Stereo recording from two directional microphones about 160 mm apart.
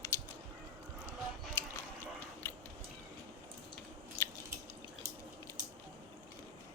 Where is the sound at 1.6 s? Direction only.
15° left (ahead or behind).